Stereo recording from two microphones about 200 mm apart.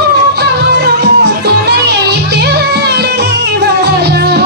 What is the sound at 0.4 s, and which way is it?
Music, 55° right (ahead or behind).